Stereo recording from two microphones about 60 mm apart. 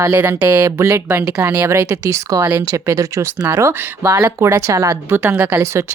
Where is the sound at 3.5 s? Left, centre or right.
Right.